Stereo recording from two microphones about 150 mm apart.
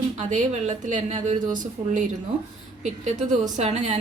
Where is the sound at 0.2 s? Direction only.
55° right (ahead or behind).